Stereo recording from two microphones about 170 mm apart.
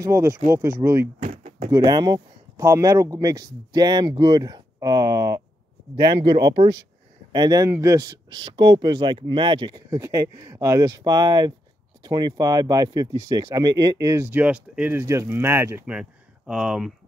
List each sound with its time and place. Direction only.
0.0 s speech: 15° right (ahead or behind)
1.2 s a sound: 45° right (ahead or behind)
1.7 s speech: 25° right (ahead or behind); by 16.9 s 5° right (ahead or behind)